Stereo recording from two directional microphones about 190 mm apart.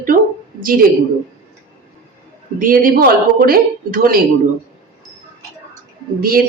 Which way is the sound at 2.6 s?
45° right (ahead or behind).